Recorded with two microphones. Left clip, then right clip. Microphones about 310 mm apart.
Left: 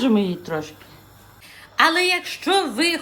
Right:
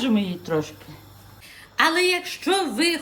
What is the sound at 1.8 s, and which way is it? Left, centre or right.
A woman's voice, centre.